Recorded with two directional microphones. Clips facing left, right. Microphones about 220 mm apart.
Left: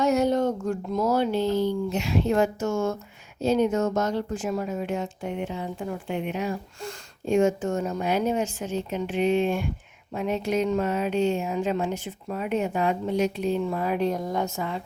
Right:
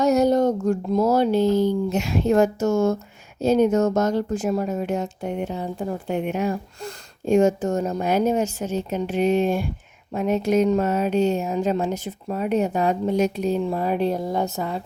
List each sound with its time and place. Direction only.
0.0 s speech: 40° right (ahead or behind)